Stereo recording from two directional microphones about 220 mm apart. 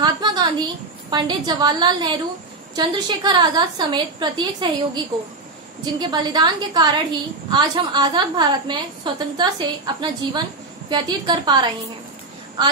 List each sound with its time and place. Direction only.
0.0 s a sound: 20° right (ahead or behind)
1.1 s a woman's voice: 20° right (ahead or behind)
5.9 s a woman's voice: 20° right (ahead or behind)